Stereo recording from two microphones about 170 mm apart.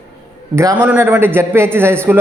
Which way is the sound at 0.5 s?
15° right (ahead or behind).